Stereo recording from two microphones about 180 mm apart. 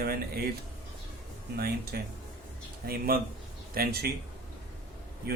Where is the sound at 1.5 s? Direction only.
60° right (ahead or behind).